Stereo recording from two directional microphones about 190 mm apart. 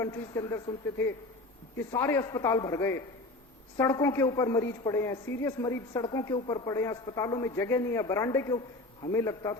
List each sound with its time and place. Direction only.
0.0 s a woman's voice: 15° left (ahead or behind)